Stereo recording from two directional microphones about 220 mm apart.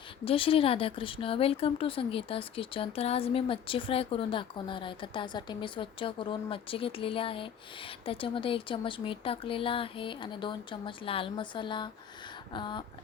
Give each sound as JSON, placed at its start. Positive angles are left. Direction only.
{"t": 0.3, "sound": "speech", "side_deg": 25}